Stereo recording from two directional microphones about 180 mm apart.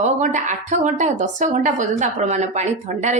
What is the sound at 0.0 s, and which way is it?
Speech, 45° right (ahead or behind).